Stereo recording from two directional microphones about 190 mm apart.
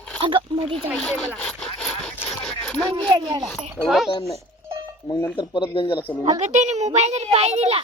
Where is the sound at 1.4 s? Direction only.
5° left (ahead or behind).